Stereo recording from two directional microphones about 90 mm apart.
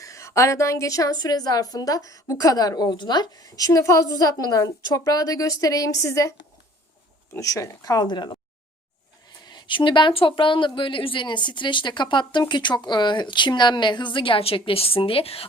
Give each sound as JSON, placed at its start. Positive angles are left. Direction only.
{"t": 0.0, "sound": "a woman's voice", "side_deg": 35}
{"t": 7.3, "sound": "speech", "side_deg": 40}
{"t": 9.4, "sound": "speech", "side_deg": 55}